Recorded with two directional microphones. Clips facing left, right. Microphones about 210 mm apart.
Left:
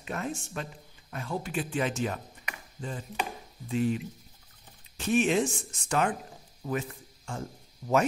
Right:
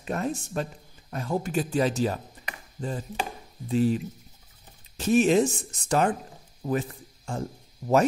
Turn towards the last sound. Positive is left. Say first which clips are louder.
# right 4 dB
turn(degrees=-35)  # may be behind; listen again after turning